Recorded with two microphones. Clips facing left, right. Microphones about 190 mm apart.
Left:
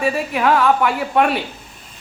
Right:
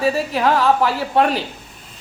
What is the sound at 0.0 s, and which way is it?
A woman's voice, 30° right (ahead or behind).